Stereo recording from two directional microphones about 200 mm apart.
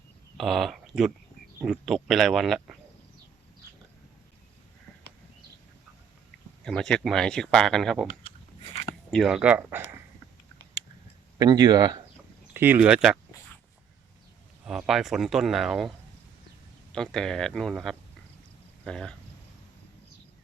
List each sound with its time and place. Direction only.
0.3 s speech: centre (ahead or behind)
6.7 s speech: 5° left (ahead or behind)
8.7 s a sound: 35° left (ahead or behind)
9.0 s speech: centre (ahead or behind)
11.3 s speech: 20° right (ahead or behind)
12.5 s speech: 10° right (ahead or behind)
14.6 s speech: 5° right (ahead or behind)
16.9 s speech: 5° left (ahead or behind)